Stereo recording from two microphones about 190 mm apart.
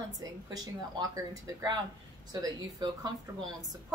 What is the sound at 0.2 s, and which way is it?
A woman's voice, 20° right (ahead or behind).